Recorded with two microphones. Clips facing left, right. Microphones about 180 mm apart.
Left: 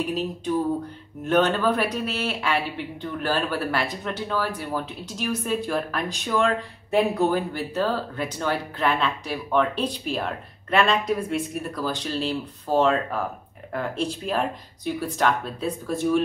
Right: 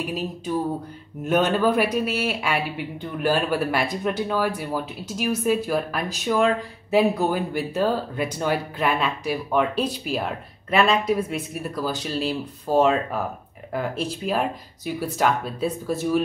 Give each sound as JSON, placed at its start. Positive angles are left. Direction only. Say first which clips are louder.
{"t": 1.2, "sound": "a man's voice", "louder": "right 1 dB", "side_deg": -10}